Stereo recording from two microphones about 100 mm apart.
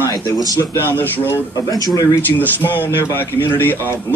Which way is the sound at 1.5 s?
35° left (ahead or behind).